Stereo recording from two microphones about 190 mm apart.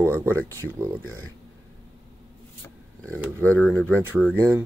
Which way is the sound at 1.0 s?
90° right.